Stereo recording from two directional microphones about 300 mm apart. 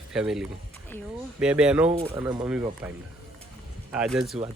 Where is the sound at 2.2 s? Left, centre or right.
Centre.